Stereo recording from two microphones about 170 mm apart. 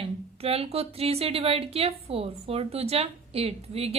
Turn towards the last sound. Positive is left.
turn(degrees=-35)  # may be behind; listen again after turning